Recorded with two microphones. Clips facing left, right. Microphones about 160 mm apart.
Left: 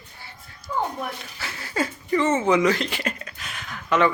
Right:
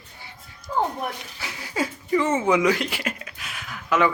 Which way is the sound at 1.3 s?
15° right (ahead or behind).